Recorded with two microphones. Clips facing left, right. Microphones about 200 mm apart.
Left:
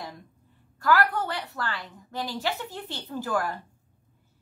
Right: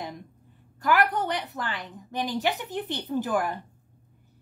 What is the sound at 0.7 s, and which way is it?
A woman's voice, 20° right (ahead or behind).